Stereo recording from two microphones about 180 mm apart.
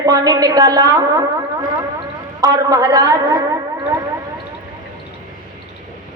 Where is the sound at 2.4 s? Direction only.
20° right (ahead or behind).